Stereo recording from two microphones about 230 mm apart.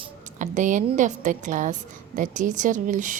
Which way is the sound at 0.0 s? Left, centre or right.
Right.